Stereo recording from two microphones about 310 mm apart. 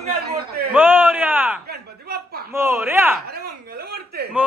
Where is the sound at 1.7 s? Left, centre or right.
Right.